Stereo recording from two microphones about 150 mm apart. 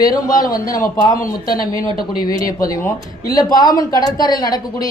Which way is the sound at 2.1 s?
25° left (ahead or behind).